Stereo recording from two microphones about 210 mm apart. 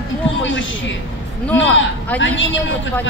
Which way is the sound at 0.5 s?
60° left (ahead or behind).